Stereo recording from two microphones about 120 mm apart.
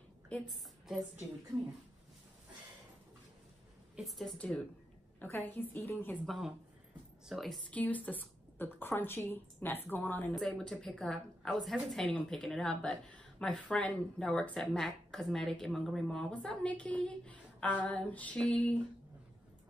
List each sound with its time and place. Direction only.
0.5 s a woman's voice: centre (ahead or behind)
3.9 s a woman's voice: centre (ahead or behind)
5.2 s a woman's voice: 15° left (ahead or behind)
6.2 s a woman's voice: centre (ahead or behind)
7.7 s a woman's voice: 10° left (ahead or behind)
10.3 s a woman's voice: 5° left (ahead or behind)